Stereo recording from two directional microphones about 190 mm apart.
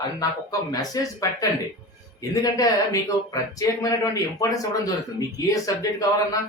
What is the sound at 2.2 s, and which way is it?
Speech, 20° left (ahead or behind).